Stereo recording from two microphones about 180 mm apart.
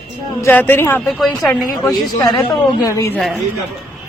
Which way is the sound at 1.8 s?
20° left (ahead or behind).